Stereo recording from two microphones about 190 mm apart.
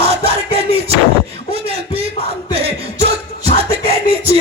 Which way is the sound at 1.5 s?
30° right (ahead or behind).